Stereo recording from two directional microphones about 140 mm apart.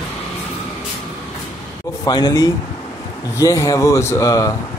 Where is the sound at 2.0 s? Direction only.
30° left (ahead or behind).